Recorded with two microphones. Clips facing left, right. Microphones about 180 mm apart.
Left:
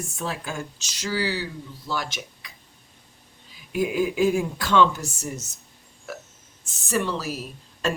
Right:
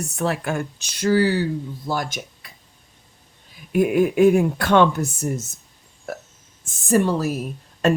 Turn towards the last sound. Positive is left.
turn(degrees=-60)  # may be behind; listen again after turning